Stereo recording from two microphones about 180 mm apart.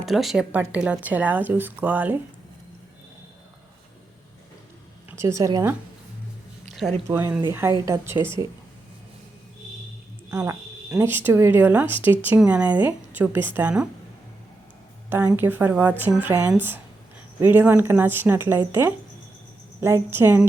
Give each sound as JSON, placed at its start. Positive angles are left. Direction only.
{"t": 0.0, "sound": "speech", "side_deg": 0}
{"t": 5.1, "sound": "speech", "side_deg": -15}
{"t": 7.1, "sound": "speech", "side_deg": -10}
{"t": 10.2, "sound": "speech", "side_deg": -15}
{"t": 15.3, "sound": "speech", "side_deg": -10}